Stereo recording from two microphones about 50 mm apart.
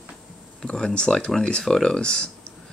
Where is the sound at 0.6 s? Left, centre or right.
Centre.